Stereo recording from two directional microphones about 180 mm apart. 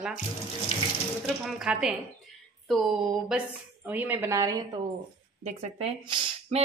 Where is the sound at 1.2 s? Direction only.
5° right (ahead or behind).